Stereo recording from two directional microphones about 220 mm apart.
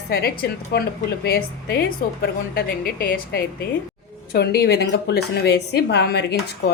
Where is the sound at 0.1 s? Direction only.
45° left (ahead or behind).